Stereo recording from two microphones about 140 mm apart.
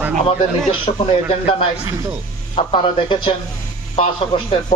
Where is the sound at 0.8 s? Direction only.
40° left (ahead or behind).